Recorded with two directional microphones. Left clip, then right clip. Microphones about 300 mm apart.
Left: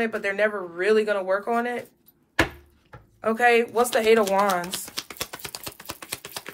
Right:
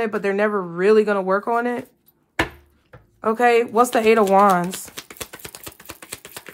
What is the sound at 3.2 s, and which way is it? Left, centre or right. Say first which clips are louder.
Speech: right 3 dB; centre.